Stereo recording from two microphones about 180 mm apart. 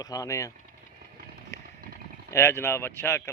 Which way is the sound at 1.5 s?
15° left (ahead or behind).